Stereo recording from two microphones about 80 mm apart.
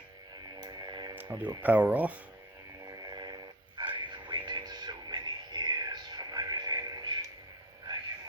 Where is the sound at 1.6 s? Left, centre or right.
Right.